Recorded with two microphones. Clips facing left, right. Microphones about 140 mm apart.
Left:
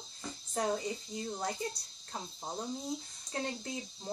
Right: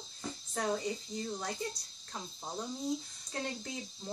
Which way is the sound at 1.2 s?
30° left (ahead or behind).